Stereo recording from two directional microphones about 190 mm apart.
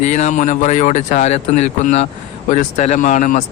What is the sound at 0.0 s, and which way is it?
Speech, 40° left (ahead or behind).